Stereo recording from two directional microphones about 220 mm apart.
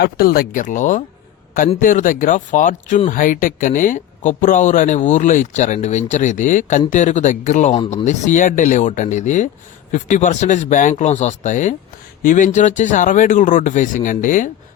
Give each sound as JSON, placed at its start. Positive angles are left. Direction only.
{"t": 0.0, "sound": "speech", "side_deg": 45}